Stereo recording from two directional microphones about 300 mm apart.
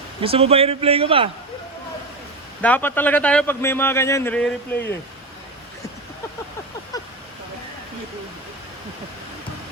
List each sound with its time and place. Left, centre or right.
0.2 s a man's voice: centre
2.6 s a man's voice: centre
6.9 s a sound: centre